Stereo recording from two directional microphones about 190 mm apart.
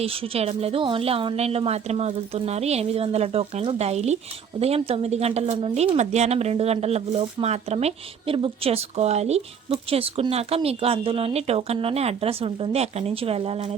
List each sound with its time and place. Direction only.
0.0 s a woman's voice: 30° right (ahead or behind)